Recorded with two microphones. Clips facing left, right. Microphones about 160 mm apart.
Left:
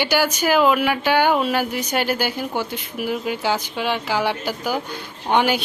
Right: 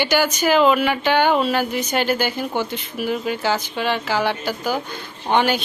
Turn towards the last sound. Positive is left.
turn(degrees=10)  # may be behind; listen again after turning